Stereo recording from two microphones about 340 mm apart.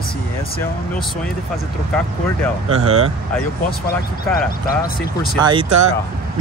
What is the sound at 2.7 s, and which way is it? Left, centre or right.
Speech, centre.